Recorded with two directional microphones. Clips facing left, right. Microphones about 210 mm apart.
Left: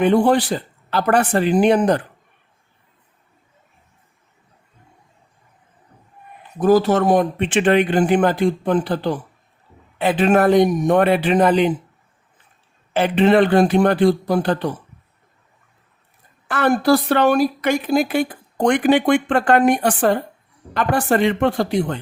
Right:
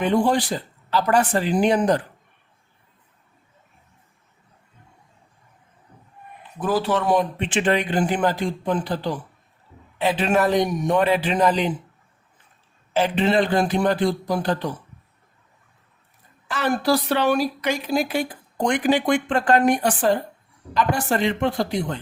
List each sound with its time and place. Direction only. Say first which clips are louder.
0.0 s speech: left 5 dB; 60° left (ahead or behind)
6.6 s speech: left 7 dB; 45° left (ahead or behind); by 11.7 s 60° left (ahead or behind)
12.9 s speech: left 5 dB; 60° left (ahead or behind)
16.5 s speech: left 5 dB; 55° left (ahead or behind)